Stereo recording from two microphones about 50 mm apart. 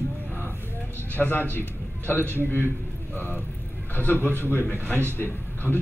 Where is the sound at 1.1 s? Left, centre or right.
Left.